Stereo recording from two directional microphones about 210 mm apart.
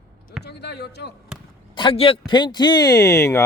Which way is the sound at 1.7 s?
25° left (ahead or behind).